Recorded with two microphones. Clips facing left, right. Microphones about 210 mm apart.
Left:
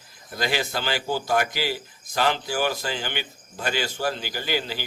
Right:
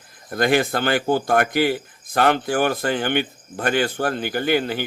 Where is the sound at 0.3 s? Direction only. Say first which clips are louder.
Right 8 dB; 55° right (ahead or behind).